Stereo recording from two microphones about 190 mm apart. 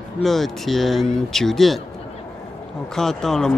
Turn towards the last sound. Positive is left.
turn(degrees=5)  # may be behind; listen again after turning